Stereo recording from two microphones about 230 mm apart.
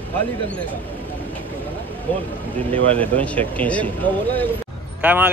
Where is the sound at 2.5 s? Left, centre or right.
Centre.